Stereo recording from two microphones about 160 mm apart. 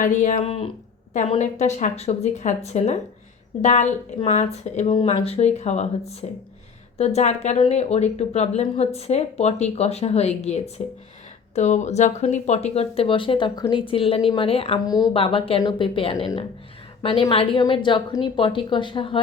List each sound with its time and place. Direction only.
0.0 s speech: 55° left (ahead or behind)
0.3 s speech: 35° left (ahead or behind)
4.9 s speech: 35° left (ahead or behind)
14.8 s speech: 25° left (ahead or behind)
15.1 s a woman's voice: 35° left (ahead or behind)